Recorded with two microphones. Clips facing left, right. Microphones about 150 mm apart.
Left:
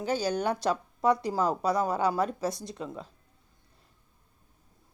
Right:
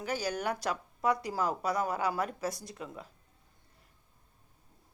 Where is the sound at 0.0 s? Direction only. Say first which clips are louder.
Left 5 dB; 25° left (ahead or behind).